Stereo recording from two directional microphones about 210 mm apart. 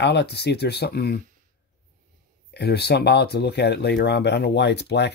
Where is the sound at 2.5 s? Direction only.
50° left (ahead or behind).